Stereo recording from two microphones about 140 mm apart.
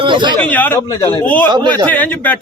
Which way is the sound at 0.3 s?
10° left (ahead or behind).